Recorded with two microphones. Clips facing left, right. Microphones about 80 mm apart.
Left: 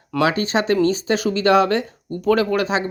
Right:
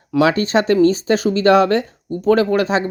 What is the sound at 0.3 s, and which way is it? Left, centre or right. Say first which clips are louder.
Speech: right 4 dB; right.